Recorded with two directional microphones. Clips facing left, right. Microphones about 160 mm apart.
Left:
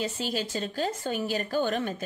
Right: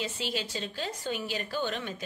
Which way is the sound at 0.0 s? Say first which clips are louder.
Left 3 dB; 45° left (ahead or behind).